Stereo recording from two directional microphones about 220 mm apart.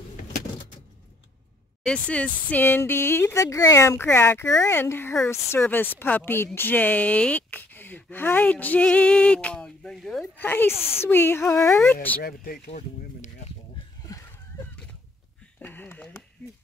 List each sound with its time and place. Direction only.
1.8 s speech: 5° left (ahead or behind)
12.2 s speech: 45° left (ahead or behind)
15.6 s a sound: 10° left (ahead or behind)